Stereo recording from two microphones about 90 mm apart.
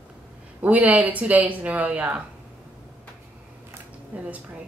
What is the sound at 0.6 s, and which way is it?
A woman's voice, 20° right (ahead or behind).